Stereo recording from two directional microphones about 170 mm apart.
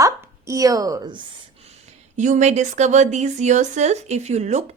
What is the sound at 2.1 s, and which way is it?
A woman's voice, 45° right (ahead or behind).